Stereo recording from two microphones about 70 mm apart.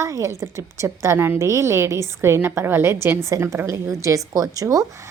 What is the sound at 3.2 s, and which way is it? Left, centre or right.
A woman's voice, right.